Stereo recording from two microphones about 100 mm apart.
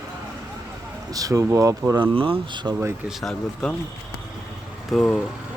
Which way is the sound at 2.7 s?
25° right (ahead or behind).